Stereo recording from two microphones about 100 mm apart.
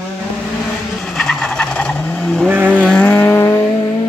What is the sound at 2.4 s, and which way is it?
Vehicle, 20° right (ahead or behind).